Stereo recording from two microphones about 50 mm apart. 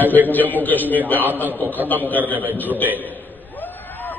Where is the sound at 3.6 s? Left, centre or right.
Left.